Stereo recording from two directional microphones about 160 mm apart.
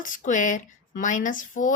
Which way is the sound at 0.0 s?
55° left (ahead or behind).